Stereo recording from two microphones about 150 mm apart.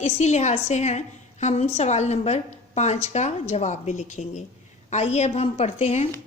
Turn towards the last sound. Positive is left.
turn(degrees=45)  # may be behind; listen again after turning